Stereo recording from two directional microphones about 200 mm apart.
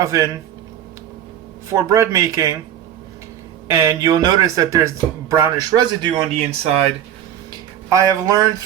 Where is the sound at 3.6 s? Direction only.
15° right (ahead or behind).